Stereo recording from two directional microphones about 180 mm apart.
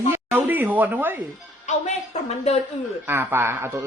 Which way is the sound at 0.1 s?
10° right (ahead or behind).